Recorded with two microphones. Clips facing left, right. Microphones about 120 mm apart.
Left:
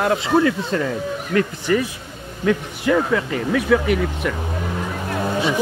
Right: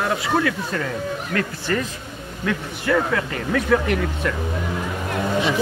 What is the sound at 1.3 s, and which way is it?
Speech, 15° left (ahead or behind).